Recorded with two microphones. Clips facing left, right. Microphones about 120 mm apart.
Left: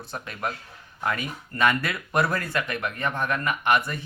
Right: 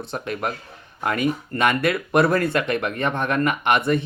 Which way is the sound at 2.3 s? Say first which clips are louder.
Right 8 dB; 65° right (ahead or behind).